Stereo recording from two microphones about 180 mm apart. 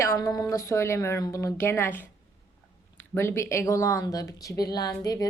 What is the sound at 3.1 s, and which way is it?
Speech, 15° left (ahead or behind).